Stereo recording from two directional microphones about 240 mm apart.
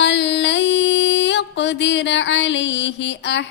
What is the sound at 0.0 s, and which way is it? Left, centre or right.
Mantra, left.